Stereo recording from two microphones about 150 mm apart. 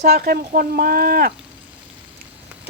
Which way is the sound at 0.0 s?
90° right.